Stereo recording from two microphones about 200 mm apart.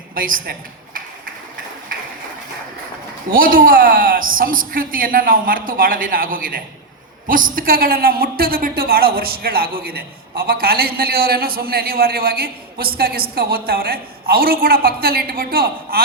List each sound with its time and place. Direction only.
0.1 s a woman's voice: 45° right (ahead or behind)
3.2 s a woman's voice: 45° right (ahead or behind)